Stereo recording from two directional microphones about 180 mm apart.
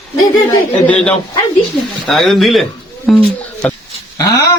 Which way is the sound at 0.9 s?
5° left (ahead or behind).